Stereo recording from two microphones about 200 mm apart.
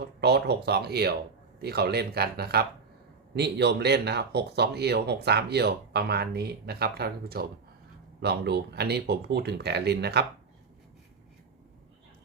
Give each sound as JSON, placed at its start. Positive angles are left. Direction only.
{"t": 0.0, "sound": "speech", "side_deg": -55}